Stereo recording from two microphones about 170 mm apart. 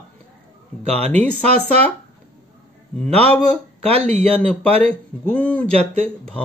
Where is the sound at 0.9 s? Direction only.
10° left (ahead or behind).